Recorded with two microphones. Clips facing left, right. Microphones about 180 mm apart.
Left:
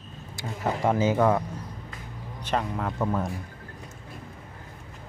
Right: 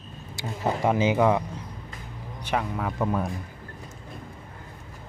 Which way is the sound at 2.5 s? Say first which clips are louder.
Even; 10° right (ahead or behind).